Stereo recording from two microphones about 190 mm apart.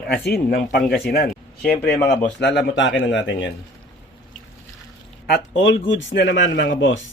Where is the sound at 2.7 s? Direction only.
75° left (ahead or behind).